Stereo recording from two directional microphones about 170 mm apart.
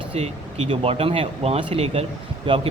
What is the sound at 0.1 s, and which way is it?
Speech, 40° right (ahead or behind).